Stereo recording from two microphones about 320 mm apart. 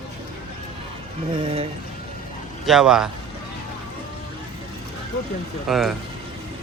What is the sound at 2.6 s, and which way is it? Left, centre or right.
Speech, centre.